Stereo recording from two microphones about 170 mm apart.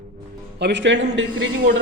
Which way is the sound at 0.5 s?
85° right.